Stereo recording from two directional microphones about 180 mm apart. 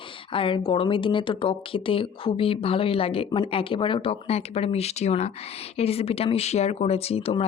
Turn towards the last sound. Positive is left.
turn(degrees=35)  # may be behind; listen again after turning